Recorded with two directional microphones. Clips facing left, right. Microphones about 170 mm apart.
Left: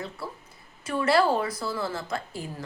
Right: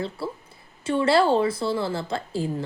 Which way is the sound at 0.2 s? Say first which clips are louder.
Right 6 dB; 30° right (ahead or behind).